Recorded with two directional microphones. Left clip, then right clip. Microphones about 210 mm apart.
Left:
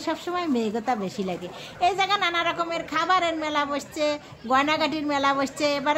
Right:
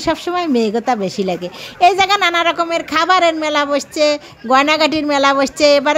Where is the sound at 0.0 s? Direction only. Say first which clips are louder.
Right 10 dB; 35° right (ahead or behind).